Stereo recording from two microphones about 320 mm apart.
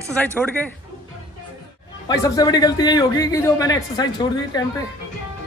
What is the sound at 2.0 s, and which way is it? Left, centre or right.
A man's voice, centre.